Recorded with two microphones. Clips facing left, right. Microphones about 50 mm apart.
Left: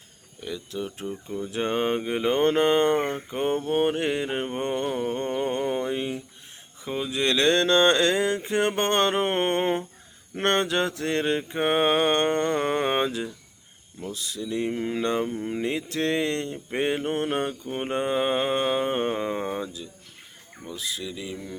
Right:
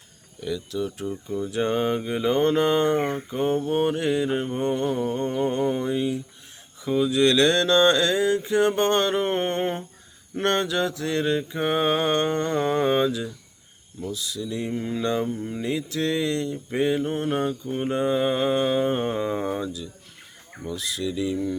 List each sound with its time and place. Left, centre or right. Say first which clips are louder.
0.4 s mantra: right 4 dB; left
20.7 s speech: right 5 dB; centre